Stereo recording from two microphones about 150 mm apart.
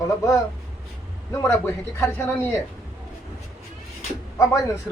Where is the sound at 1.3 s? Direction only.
15° left (ahead or behind).